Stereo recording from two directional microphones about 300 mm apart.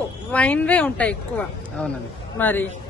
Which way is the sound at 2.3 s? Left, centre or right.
Centre.